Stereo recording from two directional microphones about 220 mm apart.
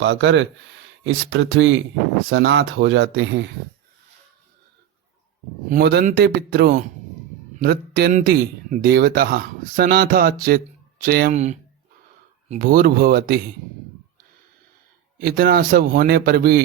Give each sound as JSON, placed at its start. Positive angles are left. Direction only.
{"t": 0.0, "sound": "speech", "side_deg": -55}
{"t": 5.6, "sound": "speech", "side_deg": -45}
{"t": 15.2, "sound": "speech", "side_deg": -40}